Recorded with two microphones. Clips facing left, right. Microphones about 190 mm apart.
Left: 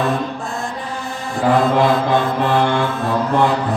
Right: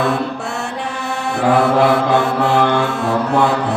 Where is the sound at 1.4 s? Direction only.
70° right (ahead or behind).